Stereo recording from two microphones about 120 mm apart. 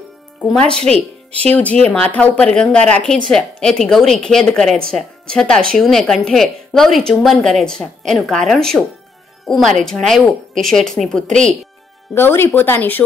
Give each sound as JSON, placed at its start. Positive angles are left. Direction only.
{"t": 0.4, "sound": "a woman's voice", "side_deg": 10}
{"t": 12.1, "sound": "speech", "side_deg": 20}